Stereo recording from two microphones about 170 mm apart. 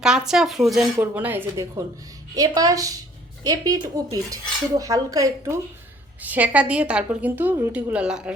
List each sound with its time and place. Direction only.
0.0 s a woman's voice: 5° right (ahead or behind); by 5.5 s 20° right (ahead or behind)
6.2 s a woman's voice: 10° right (ahead or behind)